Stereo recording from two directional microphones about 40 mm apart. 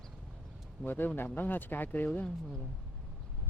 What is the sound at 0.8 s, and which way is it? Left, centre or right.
Speech, left.